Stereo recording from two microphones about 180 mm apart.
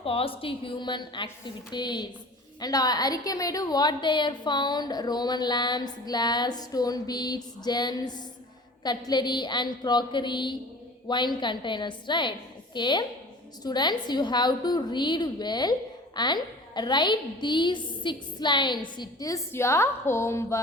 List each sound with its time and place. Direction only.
0.0 s a woman's voice: 30° left (ahead or behind); by 20.6 s 15° left (ahead or behind)